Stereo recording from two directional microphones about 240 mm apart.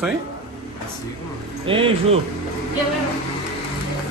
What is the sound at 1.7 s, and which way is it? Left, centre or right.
Speech, right.